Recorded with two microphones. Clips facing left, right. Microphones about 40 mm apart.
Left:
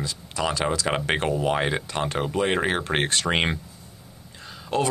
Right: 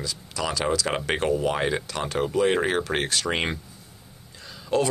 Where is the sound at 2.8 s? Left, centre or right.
Left.